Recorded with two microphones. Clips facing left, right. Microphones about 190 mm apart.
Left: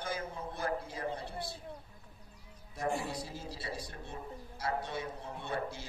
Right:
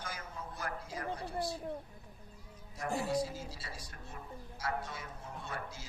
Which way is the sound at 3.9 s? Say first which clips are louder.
Left 4 dB; 30° left (ahead or behind).